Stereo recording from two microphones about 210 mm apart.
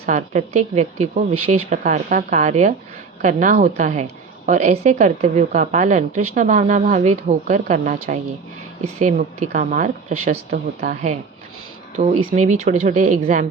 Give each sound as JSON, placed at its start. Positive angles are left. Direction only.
{"t": 0.0, "sound": "a woman's voice", "side_deg": -35}
{"t": 9.0, "sound": "a woman's voice", "side_deg": -35}